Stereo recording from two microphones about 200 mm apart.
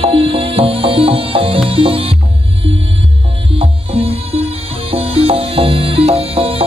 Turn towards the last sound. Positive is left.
turn(degrees=-30)  # may be behind; listen again after turning